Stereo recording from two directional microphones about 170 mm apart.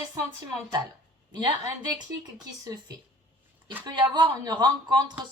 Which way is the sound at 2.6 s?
20° right (ahead or behind).